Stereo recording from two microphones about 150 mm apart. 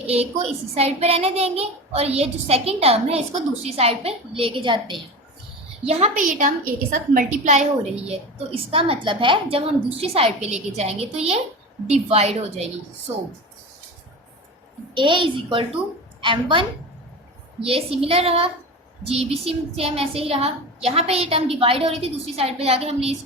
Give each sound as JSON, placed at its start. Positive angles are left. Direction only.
{"t": 0.1, "sound": "a child's voice", "side_deg": -45}
{"t": 5.8, "sound": "a child's voice", "side_deg": -45}
{"t": 7.1, "sound": "a woman's voice", "side_deg": -60}
{"t": 14.9, "sound": "a woman's voice", "side_deg": -35}